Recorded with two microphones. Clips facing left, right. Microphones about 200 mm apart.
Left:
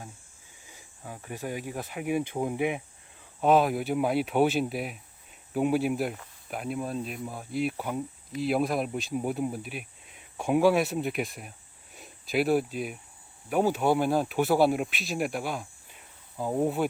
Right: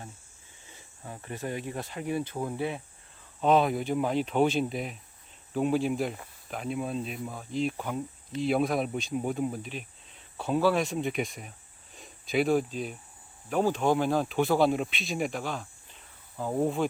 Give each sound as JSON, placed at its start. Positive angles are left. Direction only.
{"t": 0.7, "sound": "speech", "side_deg": 5}
{"t": 3.4, "sound": "speech", "side_deg": 5}